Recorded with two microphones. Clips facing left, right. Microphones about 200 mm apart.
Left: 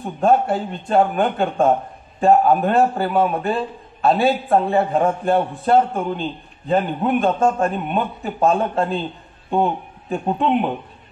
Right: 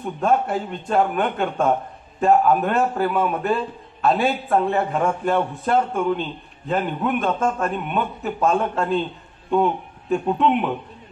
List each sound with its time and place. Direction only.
0.0 s a man's voice: 30° left (ahead or behind)